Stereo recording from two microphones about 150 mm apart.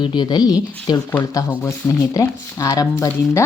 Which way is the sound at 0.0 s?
30° left (ahead or behind).